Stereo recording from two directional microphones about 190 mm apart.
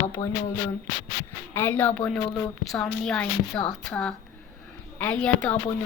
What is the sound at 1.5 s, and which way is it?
A woman's voice, 10° left (ahead or behind).